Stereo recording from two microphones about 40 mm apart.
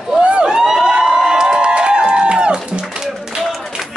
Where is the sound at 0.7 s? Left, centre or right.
Centre.